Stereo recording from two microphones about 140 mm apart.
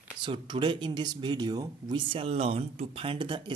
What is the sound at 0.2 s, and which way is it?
Speech, 35° right (ahead or behind).